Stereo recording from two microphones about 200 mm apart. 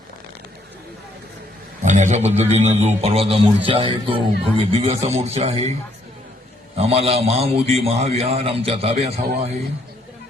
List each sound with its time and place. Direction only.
1.8 s a man's voice: 35° right (ahead or behind)
6.7 s a man's voice: 30° right (ahead or behind)